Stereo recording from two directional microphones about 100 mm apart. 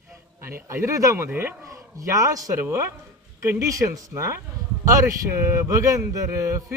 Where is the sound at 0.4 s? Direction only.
25° right (ahead or behind).